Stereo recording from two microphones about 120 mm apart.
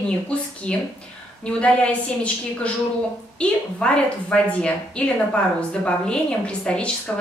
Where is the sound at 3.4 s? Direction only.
10° left (ahead or behind).